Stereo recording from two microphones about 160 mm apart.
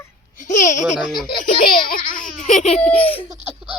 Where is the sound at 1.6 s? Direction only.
65° left (ahead or behind); by 3.2 s 35° left (ahead or behind).